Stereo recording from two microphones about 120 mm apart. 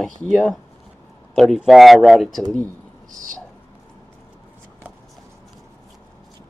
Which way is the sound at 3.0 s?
90° right.